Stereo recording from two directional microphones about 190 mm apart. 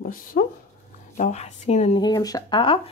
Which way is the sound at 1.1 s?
40° left (ahead or behind).